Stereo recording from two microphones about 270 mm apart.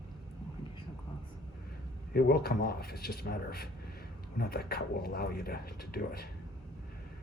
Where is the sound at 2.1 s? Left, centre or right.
Left.